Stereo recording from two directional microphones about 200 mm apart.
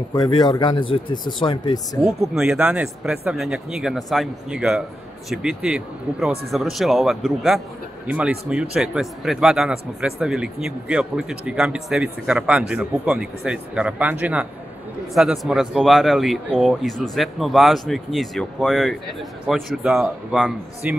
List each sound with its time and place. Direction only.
0.1 s speech: 20° left (ahead or behind)
2.3 s speech: 5° right (ahead or behind)